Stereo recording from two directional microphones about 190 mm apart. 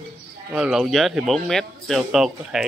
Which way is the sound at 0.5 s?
5° right (ahead or behind).